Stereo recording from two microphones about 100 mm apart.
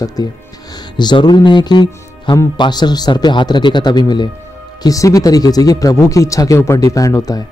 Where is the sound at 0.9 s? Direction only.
45° left (ahead or behind).